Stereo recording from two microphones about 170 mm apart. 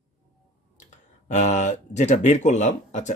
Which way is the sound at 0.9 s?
45° left (ahead or behind).